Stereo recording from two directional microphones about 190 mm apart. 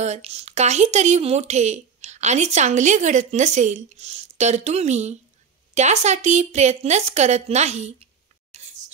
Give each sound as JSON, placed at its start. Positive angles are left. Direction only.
{"t": 0.0, "sound": "speech", "side_deg": -35}
{"t": 8.6, "sound": "scissors", "side_deg": -40}